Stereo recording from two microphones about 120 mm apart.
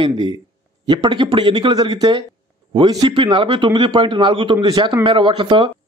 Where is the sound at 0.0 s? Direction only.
45° right (ahead or behind).